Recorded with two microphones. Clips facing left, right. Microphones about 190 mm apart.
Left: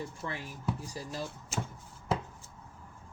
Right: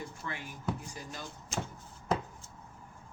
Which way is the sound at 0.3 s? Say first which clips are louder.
Even; 35° left (ahead or behind).